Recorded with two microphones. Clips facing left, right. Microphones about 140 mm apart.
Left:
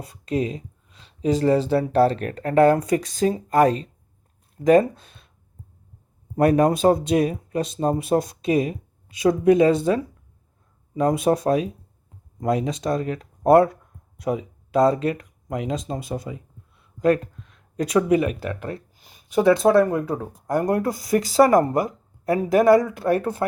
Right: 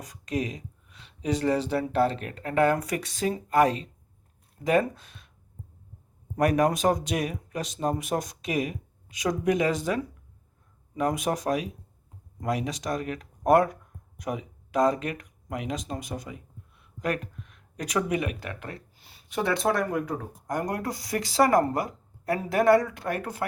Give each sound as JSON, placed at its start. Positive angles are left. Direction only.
{"t": 0.0, "sound": "a sound", "side_deg": 30}
{"t": 1.7, "sound": "speech", "side_deg": 35}
{"t": 6.3, "sound": "speech", "side_deg": 30}
{"t": 19.0, "sound": "a sound", "side_deg": 20}
{"t": 19.6, "sound": "a woman's voice", "side_deg": 25}
{"t": 23.0, "sound": "speech", "side_deg": 35}